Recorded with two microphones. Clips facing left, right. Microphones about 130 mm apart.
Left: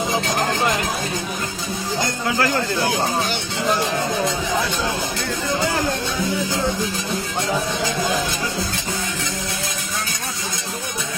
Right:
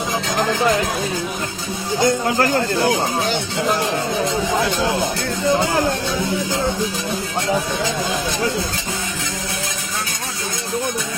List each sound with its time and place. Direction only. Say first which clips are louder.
2.2 s speech: right 3 dB; 40° right (ahead or behind)